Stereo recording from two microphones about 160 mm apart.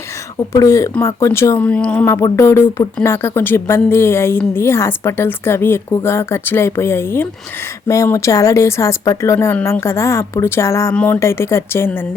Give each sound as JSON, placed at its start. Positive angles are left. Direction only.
{"t": 0.5, "sound": "a woman's voice", "side_deg": 20}